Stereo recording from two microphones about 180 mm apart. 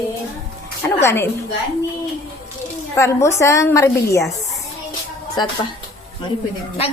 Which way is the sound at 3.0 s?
15° left (ahead or behind).